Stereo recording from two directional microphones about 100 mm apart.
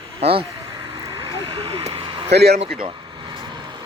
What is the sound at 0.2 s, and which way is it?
Speech, 65° right (ahead or behind).